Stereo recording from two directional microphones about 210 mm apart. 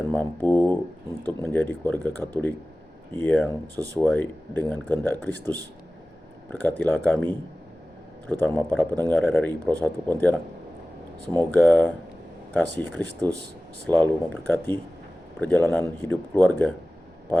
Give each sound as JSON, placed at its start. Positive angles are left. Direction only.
{"t": 0.0, "sound": "a man's voice", "side_deg": 10}
{"t": 11.3, "sound": "a man's voice", "side_deg": 5}
{"t": 13.0, "sound": "speech", "side_deg": -20}
{"t": 13.8, "sound": "a man's voice", "side_deg": 5}